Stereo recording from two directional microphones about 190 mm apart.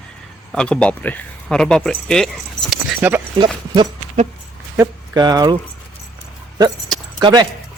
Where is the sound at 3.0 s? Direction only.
10° right (ahead or behind).